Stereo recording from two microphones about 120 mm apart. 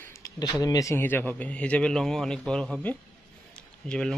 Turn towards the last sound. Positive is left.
turn(degrees=5)  # may be behind; listen again after turning